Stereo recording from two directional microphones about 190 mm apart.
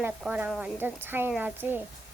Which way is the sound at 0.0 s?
5° right (ahead or behind).